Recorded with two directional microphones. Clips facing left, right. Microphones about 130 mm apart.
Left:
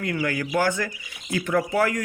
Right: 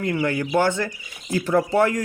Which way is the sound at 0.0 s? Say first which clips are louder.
Right 3 dB; 25° right (ahead or behind).